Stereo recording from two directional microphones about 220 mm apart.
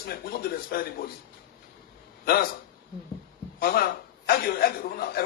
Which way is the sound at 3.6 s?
45° left (ahead or behind).